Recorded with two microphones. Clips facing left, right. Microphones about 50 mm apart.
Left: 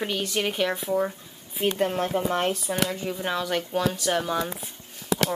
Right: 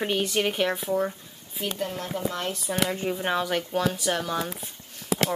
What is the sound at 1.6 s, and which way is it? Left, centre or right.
Speech, left.